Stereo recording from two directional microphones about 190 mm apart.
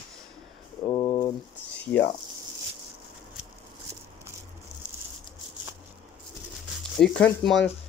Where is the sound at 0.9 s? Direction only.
20° left (ahead or behind).